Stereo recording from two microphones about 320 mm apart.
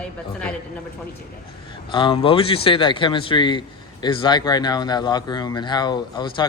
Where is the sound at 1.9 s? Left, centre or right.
Centre.